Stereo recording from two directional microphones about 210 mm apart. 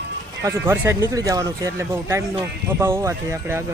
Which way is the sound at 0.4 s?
10° right (ahead or behind).